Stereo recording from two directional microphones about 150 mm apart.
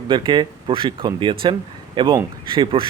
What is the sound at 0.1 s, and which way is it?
Speech, 35° right (ahead or behind).